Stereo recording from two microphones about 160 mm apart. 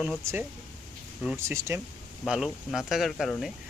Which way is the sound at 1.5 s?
15° right (ahead or behind).